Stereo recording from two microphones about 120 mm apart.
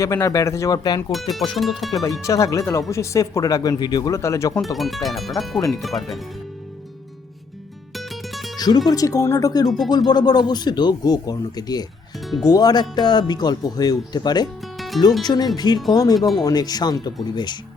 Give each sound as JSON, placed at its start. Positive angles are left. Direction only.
{"t": 0.0, "sound": "speech", "side_deg": 25}
{"t": 1.1, "sound": "speech", "side_deg": 0}
{"t": 2.2, "sound": "speech", "side_deg": 25}
{"t": 4.1, "sound": "speech", "side_deg": 25}
{"t": 4.5, "sound": "speech", "side_deg": 0}
{"t": 7.9, "sound": "music", "side_deg": 0}
{"t": 8.5, "sound": "music", "side_deg": 35}
{"t": 8.9, "sound": "speech", "side_deg": 30}
{"t": 9.6, "sound": "speech", "side_deg": 0}
{"t": 9.9, "sound": "speech", "side_deg": 35}
{"t": 14.8, "sound": "music", "side_deg": 0}
{"t": 15.2, "sound": "speech", "side_deg": 35}
{"t": 16.1, "sound": "speech", "side_deg": 0}
{"t": 16.4, "sound": "speech", "side_deg": 30}